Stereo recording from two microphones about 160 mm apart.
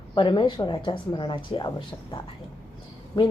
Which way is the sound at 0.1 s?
30° left (ahead or behind).